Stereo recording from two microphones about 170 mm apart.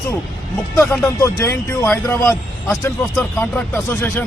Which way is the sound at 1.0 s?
15° left (ahead or behind).